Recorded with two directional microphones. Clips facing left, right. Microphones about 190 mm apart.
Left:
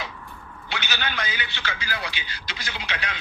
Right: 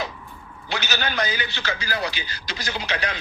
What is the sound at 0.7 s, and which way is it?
A man's voice, 40° right (ahead or behind).